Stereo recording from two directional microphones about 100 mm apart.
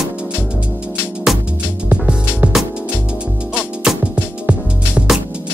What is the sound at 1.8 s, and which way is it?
Music, 15° right (ahead or behind).